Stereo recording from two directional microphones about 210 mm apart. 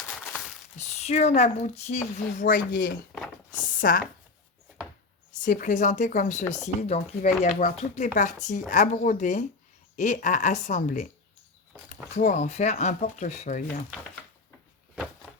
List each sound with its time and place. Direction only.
0.8 s speech: 30° left (ahead or behind)
3.1 s speech: centre (ahead or behind)
3.6 s speech: 40° left (ahead or behind)
5.3 s speech: 40° left (ahead or behind)
12.1 s speech: 35° left (ahead or behind)